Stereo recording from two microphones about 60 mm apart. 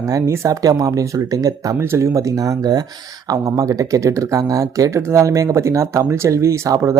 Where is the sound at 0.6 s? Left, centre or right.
Right.